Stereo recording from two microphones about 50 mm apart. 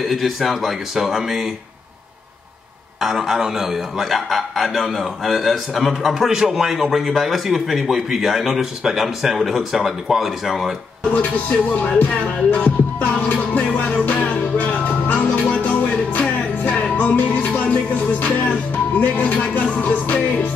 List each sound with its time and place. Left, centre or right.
0.0 s a man's voice: centre
3.0 s a man's voice: centre
11.7 s music: left